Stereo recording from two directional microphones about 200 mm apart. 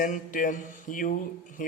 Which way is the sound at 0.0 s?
40° left (ahead or behind).